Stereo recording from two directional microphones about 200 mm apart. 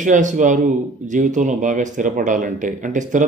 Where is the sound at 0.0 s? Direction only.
40° right (ahead or behind).